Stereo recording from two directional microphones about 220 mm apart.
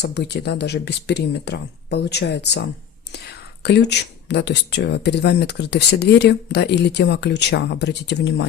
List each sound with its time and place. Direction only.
0.0 s speech: 50° left (ahead or behind)